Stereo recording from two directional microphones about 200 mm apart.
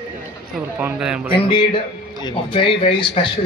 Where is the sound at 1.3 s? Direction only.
25° left (ahead or behind).